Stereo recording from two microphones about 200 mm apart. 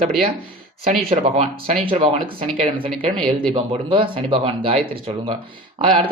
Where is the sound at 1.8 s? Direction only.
25° right (ahead or behind).